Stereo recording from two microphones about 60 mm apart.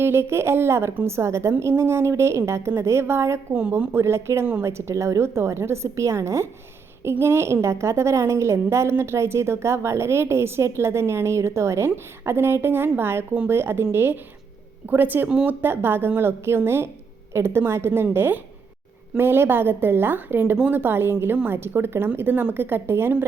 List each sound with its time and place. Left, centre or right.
0.0 s a woman's voice: right